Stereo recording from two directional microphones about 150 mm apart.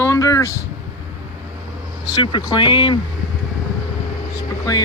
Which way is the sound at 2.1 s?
30° left (ahead or behind).